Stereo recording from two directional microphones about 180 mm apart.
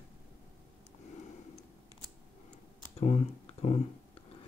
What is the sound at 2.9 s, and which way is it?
Speech, 35° left (ahead or behind).